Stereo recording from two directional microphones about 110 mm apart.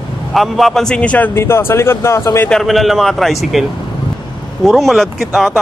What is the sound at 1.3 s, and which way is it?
Speech, 20° left (ahead or behind).